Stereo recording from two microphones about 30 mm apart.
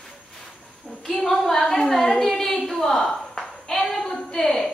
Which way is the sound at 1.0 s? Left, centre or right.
Centre.